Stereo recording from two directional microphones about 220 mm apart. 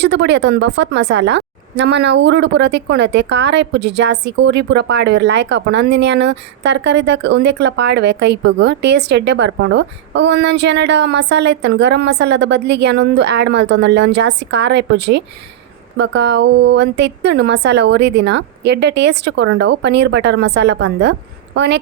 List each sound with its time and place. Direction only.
0.0 s a woman's voice: 50° right (ahead or behind)